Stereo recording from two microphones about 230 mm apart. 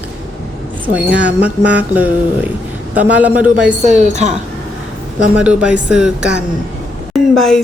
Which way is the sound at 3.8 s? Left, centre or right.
Right.